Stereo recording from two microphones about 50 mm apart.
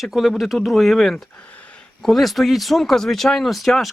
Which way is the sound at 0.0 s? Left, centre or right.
Centre.